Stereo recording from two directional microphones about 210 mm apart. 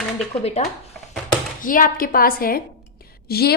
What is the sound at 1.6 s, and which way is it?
A woman's voice, 40° left (ahead or behind).